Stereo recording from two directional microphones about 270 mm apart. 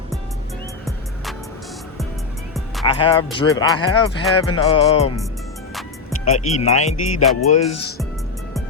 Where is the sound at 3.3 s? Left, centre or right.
Centre.